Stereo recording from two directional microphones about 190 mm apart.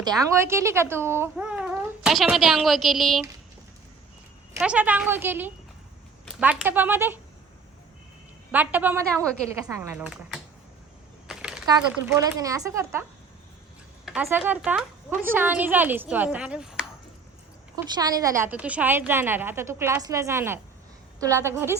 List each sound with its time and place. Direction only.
0.0 s speech: 15° right (ahead or behind)
4.6 s a woman's voice: 5° right (ahead or behind)
8.5 s a woman's voice: 10° right (ahead or behind)
11.3 s a sound: 5° right (ahead or behind)
12.1 s a woman's voice: 15° right (ahead or behind)
14.0 s a sound: centre (ahead or behind)
14.3 s a woman's voice: 10° right (ahead or behind)
17.9 s a woman's voice: 20° right (ahead or behind)